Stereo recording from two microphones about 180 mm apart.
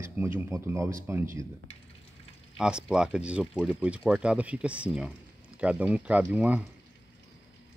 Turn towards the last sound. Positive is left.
turn(degrees=-5)  # may be behind; listen again after turning